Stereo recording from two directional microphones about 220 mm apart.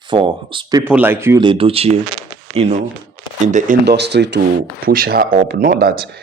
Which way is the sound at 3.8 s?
50° right (ahead or behind).